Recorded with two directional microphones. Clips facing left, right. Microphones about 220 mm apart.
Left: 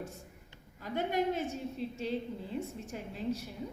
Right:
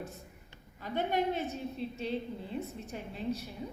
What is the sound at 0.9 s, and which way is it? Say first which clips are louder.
Speech: even; 45° left (ahead or behind).